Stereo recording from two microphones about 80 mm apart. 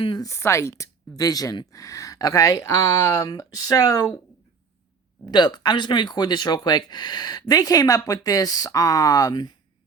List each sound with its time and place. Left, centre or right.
0.2 s speech: left
3.2 s speech: left
5.2 s speech: left